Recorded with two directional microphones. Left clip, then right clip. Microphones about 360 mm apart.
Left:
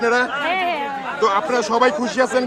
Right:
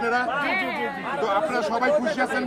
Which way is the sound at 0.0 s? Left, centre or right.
Left.